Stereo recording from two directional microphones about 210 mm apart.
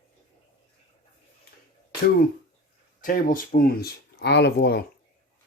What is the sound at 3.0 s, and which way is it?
Speech, 40° left (ahead or behind).